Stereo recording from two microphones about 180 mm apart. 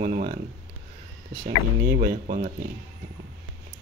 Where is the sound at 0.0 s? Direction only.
55° right (ahead or behind).